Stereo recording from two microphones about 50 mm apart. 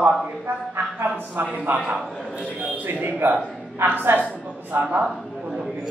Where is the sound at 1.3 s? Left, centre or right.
Right.